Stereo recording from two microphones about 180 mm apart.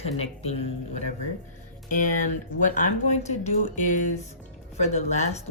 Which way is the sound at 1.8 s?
45° left (ahead or behind).